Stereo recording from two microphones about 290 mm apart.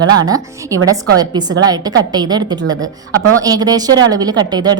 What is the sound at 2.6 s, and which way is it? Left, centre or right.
Speech, right.